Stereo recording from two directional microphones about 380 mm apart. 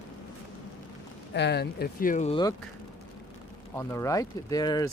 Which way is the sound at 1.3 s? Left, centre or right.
Left.